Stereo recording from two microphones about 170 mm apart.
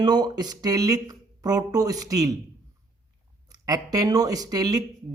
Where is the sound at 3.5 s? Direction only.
20° right (ahead or behind).